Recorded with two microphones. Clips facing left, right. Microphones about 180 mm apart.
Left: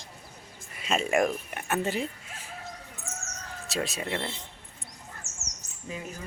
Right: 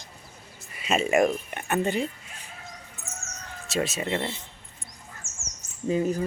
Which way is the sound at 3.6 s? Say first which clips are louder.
Right 4 dB; centre (ahead or behind).